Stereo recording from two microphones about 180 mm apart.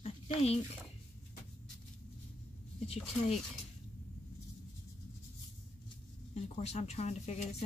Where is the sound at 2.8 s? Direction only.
35° left (ahead or behind).